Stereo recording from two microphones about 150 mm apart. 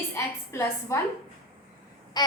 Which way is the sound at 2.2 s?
25° left (ahead or behind).